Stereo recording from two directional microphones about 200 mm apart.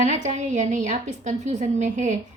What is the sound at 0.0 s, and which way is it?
A woman's voice, 35° right (ahead or behind).